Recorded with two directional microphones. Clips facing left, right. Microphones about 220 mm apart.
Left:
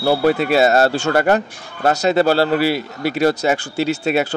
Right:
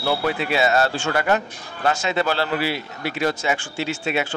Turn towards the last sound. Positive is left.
turn(degrees=40)  # may be behind; listen again after turning